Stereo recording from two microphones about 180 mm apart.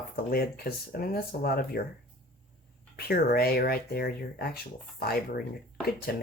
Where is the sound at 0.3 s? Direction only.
60° left (ahead or behind).